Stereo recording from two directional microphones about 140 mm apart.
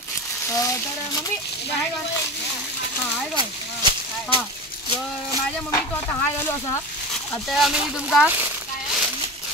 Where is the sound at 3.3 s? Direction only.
35° right (ahead or behind).